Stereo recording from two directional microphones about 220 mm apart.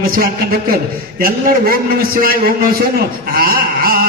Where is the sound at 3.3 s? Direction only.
40° right (ahead or behind).